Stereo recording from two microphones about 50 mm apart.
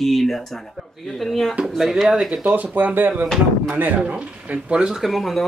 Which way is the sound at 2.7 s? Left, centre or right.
Right.